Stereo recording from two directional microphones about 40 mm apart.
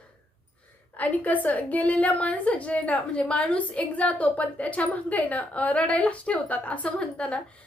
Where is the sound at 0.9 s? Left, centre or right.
Left.